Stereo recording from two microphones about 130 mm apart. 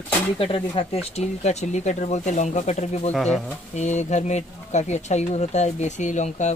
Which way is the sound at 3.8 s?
65° left (ahead or behind).